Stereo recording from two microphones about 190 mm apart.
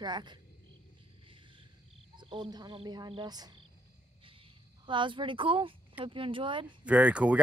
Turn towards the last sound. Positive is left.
turn(degrees=-5)  # may be behind; listen again after turning